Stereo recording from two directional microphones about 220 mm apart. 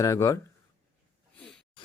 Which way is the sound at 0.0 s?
15° left (ahead or behind).